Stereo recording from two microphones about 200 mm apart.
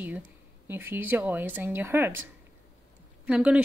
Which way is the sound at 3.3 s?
5° right (ahead or behind).